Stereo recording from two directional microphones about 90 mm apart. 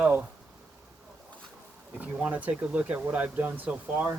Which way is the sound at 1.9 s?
15° right (ahead or behind).